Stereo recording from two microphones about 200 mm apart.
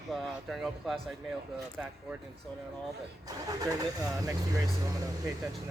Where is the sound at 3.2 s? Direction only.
15° right (ahead or behind).